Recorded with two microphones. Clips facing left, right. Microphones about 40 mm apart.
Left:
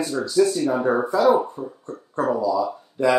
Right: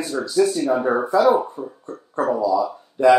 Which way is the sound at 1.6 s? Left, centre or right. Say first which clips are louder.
Right 1 dB; right.